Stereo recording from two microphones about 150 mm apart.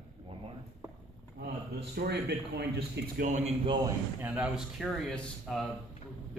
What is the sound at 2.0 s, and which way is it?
Speech, 90° right.